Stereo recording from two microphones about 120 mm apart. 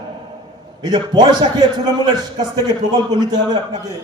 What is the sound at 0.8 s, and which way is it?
A man's voice, 35° right (ahead or behind).